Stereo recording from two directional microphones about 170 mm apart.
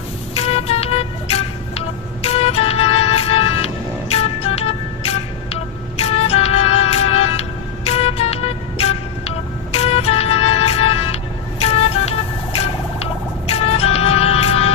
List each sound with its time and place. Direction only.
0.3 s music: 35° left (ahead or behind)
13.5 s music: 35° left (ahead or behind)